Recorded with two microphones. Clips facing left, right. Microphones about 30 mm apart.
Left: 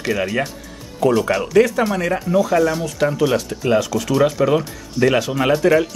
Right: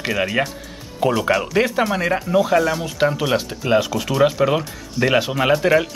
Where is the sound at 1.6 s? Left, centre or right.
Right.